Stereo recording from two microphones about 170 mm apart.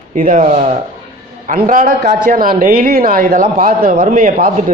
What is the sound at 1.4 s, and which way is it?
Speech, 55° right (ahead or behind).